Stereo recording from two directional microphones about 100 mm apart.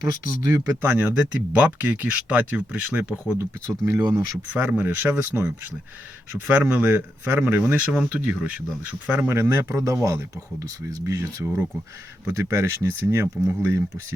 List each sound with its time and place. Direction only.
0.4 s speech: 35° right (ahead or behind)
0.8 s speech: 20° right (ahead or behind)
3.7 s speech: 35° right (ahead or behind)
4.1 s speech: 20° right (ahead or behind)
6.5 s speech: 15° right (ahead or behind)